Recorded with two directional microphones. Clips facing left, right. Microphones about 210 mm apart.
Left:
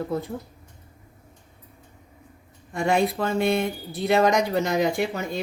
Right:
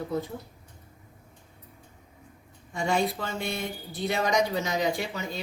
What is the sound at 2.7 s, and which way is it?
Speech, 60° left (ahead or behind).